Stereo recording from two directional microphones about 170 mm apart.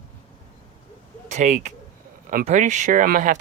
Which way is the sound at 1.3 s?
45° right (ahead or behind).